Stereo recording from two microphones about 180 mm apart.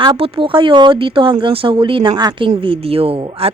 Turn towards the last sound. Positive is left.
turn(degrees=-30)  # may be behind; listen again after turning